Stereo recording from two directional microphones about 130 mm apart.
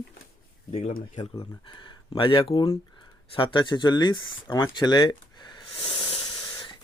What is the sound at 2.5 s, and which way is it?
Speech, 30° left (ahead or behind).